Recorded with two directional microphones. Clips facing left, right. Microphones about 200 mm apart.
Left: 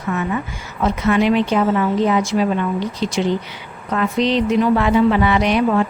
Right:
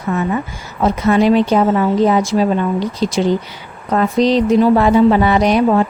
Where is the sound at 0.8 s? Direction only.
40° right (ahead or behind).